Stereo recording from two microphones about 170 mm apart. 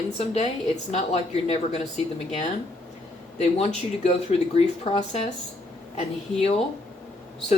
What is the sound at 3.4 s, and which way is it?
Speech, 40° left (ahead or behind).